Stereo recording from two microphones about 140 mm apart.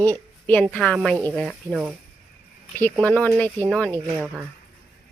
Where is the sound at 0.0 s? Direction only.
10° left (ahead or behind).